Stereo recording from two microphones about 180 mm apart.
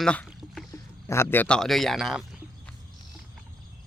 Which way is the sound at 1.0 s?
15° left (ahead or behind).